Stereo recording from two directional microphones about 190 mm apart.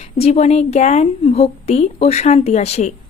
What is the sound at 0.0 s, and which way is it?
A woman's voice, 35° left (ahead or behind).